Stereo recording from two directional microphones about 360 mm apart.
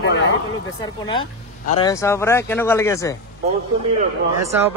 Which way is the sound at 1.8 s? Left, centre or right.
Centre.